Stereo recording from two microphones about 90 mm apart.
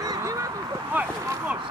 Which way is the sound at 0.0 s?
40° right (ahead or behind).